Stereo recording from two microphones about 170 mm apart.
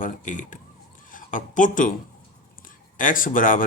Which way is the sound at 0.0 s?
50° left (ahead or behind).